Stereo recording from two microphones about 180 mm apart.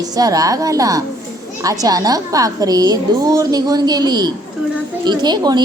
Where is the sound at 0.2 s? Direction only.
20° right (ahead or behind).